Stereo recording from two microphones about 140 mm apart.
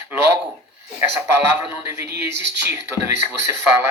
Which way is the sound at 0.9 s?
15° right (ahead or behind).